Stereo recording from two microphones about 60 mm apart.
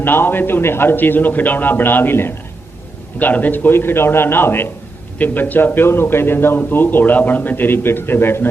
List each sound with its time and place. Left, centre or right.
0.0 s a man's voice: left